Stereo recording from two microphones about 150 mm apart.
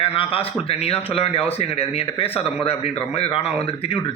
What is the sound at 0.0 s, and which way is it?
A man's voice, 40° left (ahead or behind).